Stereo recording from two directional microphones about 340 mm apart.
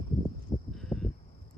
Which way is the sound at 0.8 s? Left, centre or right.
Centre.